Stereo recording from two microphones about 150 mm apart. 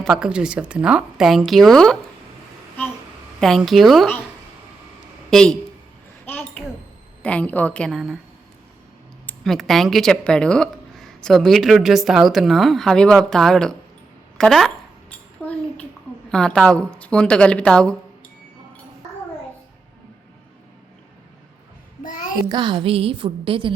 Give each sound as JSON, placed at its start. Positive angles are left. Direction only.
{"t": 0.0, "sound": "speech", "side_deg": -5}
{"t": 3.4, "sound": "speech", "side_deg": 0}
{"t": 5.3, "sound": "speech", "side_deg": 5}
{"t": 7.2, "sound": "a woman's voice", "side_deg": 10}
{"t": 9.2, "sound": "speech", "side_deg": 0}
{"t": 15.4, "sound": "a sound", "side_deg": 10}
{"t": 16.3, "sound": "a woman's voice", "side_deg": 5}
{"t": 22.0, "sound": "music", "side_deg": 65}
{"t": 22.4, "sound": "a woman's voice", "side_deg": -30}